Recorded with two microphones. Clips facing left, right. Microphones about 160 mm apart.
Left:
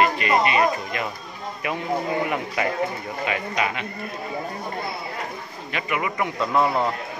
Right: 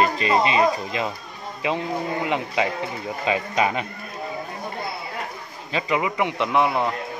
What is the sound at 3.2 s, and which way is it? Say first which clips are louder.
Speech: right 3 dB; 35° right (ahead or behind).